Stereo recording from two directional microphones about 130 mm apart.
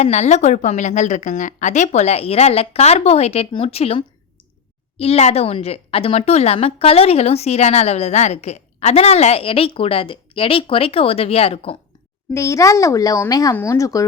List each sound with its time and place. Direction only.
0.0 s a woman's voice: 60° left (ahead or behind)
12.3 s speech: 25° left (ahead or behind)